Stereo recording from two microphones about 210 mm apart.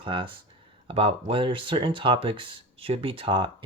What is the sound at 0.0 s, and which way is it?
Speech, 25° right (ahead or behind).